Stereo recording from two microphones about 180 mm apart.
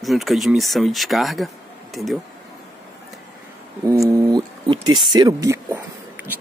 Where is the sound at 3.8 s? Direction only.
15° right (ahead or behind).